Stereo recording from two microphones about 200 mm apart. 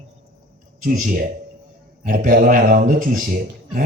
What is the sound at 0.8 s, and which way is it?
A man's voice, 40° right (ahead or behind).